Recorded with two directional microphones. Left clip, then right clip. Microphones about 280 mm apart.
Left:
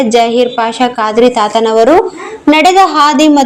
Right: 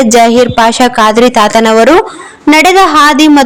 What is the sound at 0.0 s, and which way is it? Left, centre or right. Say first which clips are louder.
A woman's voice: right 4 dB; right.